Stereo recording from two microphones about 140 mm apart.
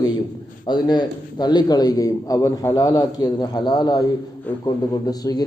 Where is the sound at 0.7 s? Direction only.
30° left (ahead or behind).